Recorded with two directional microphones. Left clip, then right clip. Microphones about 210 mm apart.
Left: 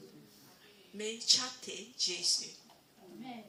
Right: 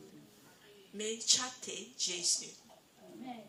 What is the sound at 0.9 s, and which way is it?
Speech, 35° right (ahead or behind).